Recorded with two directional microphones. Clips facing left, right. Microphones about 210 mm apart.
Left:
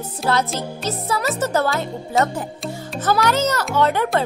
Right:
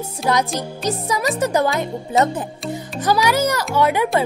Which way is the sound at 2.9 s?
10° right (ahead or behind).